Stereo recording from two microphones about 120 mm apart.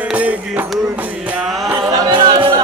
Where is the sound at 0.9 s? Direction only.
10° right (ahead or behind).